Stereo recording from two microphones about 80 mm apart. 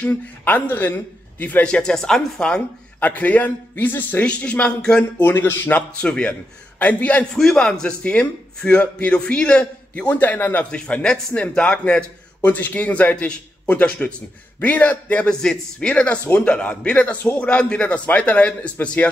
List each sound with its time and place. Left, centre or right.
0.0 s a man's voice: left
3.0 s a man's voice: left
5.2 s a man's voice: left
5.8 s a man's voice: centre
7.3 s a man's voice: centre